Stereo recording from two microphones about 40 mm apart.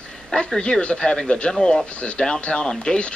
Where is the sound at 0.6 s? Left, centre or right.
Left.